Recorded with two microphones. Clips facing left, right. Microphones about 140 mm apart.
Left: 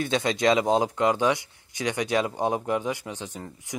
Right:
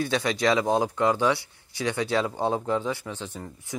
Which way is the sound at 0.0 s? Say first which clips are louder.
Left 1 dB; 20° left (ahead or behind).